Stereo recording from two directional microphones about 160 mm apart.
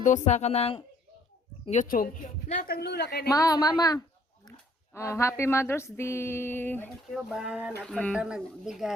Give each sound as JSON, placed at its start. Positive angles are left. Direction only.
{"t": 0.0, "sound": "speech", "side_deg": 50}
{"t": 1.8, "sound": "speech", "side_deg": 60}
{"t": 3.2, "sound": "a woman's voice", "side_deg": 20}
{"t": 4.9, "sound": "a sound", "side_deg": 15}
{"t": 7.1, "sound": "speech", "side_deg": -5}
{"t": 7.9, "sound": "a sound", "side_deg": 5}
{"t": 8.1, "sound": "speech", "side_deg": -5}